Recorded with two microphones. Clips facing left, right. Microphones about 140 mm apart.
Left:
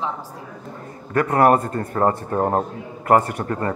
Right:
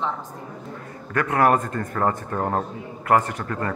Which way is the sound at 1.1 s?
35° left (ahead or behind).